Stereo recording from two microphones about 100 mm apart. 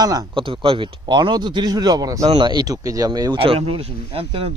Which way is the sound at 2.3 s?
50° right (ahead or behind).